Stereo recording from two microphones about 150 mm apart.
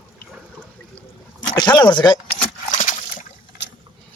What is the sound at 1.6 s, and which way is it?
Speech, 30° left (ahead or behind).